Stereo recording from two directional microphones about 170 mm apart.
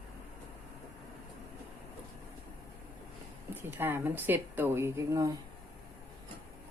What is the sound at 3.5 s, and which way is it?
Speech, 10° right (ahead or behind).